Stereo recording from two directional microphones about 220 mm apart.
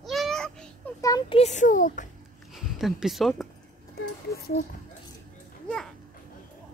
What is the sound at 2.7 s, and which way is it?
Speech, centre (ahead or behind).